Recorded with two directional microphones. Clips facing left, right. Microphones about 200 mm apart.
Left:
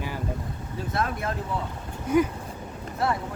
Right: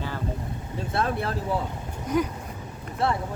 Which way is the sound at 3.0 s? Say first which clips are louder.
Right 1 dB; 30° right (ahead or behind).